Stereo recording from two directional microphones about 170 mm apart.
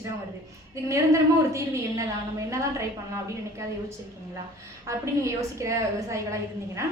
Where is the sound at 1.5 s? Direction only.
15° right (ahead or behind).